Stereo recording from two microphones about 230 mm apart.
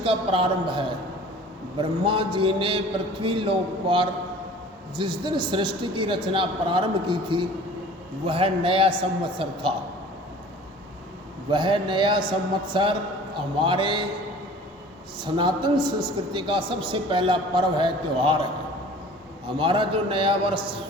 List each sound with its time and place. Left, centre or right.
0.0 s a man's voice: right
11.5 s a man's voice: right
15.2 s a man's voice: centre
19.5 s a man's voice: right